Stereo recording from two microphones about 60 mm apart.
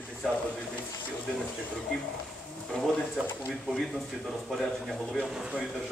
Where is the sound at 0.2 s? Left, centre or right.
Centre.